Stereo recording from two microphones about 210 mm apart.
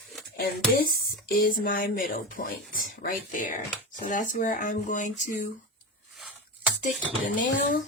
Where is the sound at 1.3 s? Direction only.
40° left (ahead or behind).